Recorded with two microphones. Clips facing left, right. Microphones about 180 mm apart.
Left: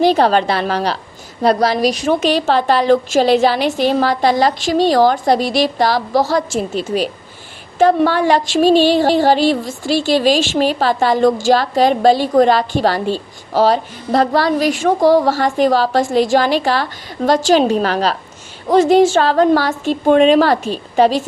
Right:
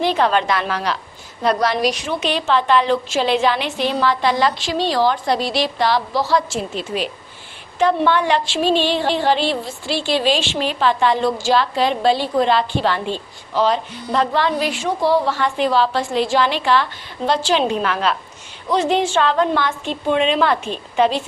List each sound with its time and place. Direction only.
0.0 s a woman's voice: 40° left (ahead or behind)